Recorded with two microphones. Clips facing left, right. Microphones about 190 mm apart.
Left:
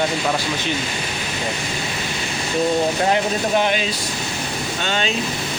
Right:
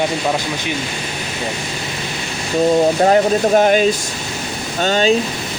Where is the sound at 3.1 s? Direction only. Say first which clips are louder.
Right 6 dB; 45° right (ahead or behind).